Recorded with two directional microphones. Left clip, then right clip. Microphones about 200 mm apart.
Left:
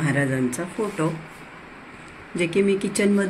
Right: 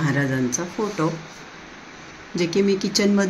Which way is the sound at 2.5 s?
20° right (ahead or behind).